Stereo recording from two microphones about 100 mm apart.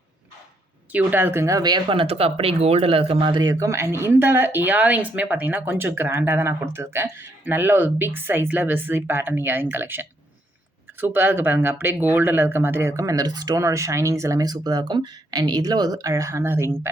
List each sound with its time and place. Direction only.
0.9 s speech: 20° right (ahead or behind); by 1.8 s 40° right (ahead or behind)
1.9 s speech: 70° right (ahead or behind); by 16.7 s 25° right (ahead or behind)